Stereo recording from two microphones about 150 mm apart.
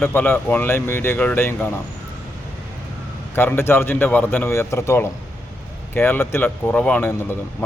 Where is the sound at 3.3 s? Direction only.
15° left (ahead or behind).